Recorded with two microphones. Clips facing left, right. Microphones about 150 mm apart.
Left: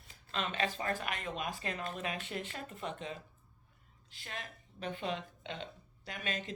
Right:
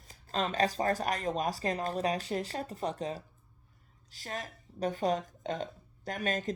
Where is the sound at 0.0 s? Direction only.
40° right (ahead or behind).